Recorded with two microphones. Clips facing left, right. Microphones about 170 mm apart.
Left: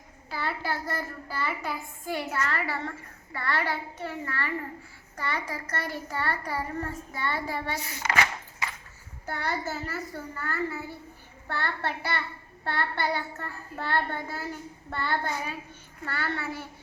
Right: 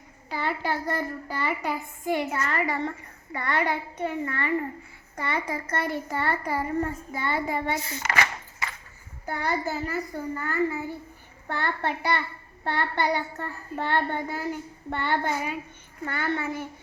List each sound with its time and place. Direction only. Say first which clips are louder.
0.3 s a child's voice: right 3 dB; 20° right (ahead or behind)
9.2 s a child's voice: right 3 dB; 10° right (ahead or behind)